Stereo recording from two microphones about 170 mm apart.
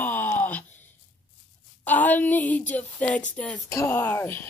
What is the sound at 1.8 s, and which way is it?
Female singing, 10° left (ahead or behind).